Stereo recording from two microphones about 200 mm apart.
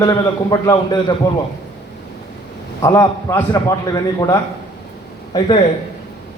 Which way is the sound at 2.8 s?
20° left (ahead or behind).